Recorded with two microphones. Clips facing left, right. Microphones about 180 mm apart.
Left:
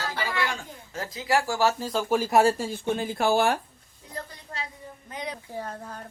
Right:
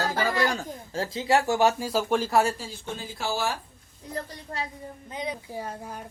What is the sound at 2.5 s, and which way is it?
Speech, 55° left (ahead or behind).